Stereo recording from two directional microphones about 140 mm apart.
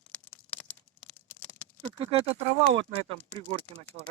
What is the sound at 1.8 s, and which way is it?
Speech, 40° right (ahead or behind).